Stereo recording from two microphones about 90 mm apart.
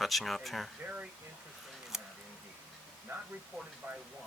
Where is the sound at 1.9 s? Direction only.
5° right (ahead or behind).